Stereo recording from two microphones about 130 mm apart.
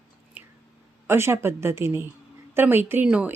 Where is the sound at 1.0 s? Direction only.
20° right (ahead or behind).